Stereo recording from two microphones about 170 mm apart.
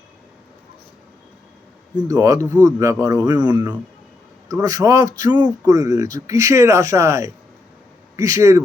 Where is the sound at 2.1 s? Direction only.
20° right (ahead or behind).